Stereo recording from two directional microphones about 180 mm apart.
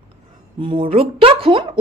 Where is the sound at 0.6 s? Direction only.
30° right (ahead or behind).